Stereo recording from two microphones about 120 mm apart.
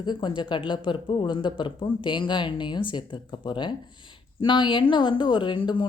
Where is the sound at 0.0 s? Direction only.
35° left (ahead or behind).